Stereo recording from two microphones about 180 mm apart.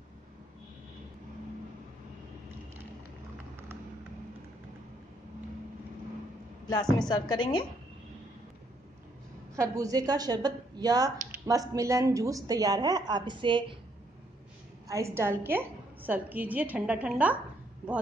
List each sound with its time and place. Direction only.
7.1 s a woman's voice: 25° left (ahead or behind)
9.6 s a woman's voice: 20° right (ahead or behind)
14.9 s a woman's voice: 15° right (ahead or behind)